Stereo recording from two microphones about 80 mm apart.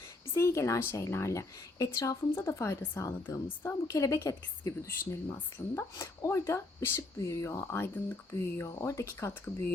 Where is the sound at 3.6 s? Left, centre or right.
Left.